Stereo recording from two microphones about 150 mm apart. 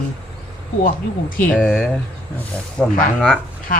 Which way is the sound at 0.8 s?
70° left (ahead or behind).